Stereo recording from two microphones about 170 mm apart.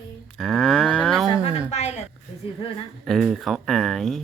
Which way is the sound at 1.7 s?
40° left (ahead or behind).